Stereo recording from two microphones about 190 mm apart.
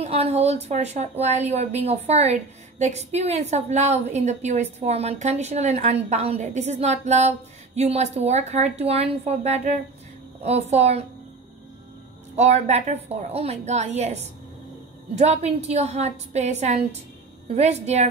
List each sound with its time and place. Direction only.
0.0 s a woman's voice: 35° right (ahead or behind)
12.4 s a woman's voice: 35° right (ahead or behind)